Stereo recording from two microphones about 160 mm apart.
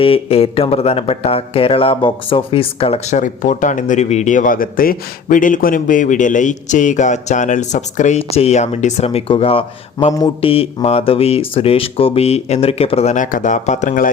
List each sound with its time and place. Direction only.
0.0 s speech: 35° left (ahead or behind); by 14.1 s 55° left (ahead or behind)